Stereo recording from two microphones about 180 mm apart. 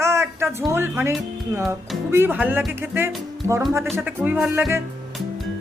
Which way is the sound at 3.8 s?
10° right (ahead or behind).